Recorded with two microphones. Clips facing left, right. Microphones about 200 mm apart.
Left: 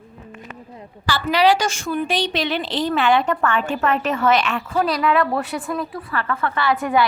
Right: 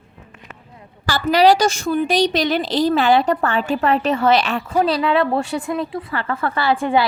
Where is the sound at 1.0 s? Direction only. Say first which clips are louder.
Right 3 dB; 40° right (ahead or behind).